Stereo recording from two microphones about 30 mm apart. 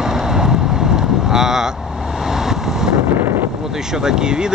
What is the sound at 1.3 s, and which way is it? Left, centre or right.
Speech, centre.